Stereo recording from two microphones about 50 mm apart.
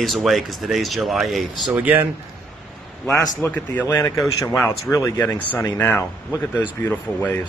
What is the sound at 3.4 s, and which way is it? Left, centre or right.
Speech, left.